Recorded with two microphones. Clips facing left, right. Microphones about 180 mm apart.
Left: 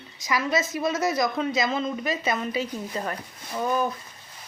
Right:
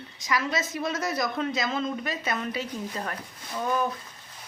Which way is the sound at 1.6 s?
Centre (ahead or behind).